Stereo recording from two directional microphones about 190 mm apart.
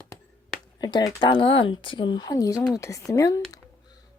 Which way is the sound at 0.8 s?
20° left (ahead or behind).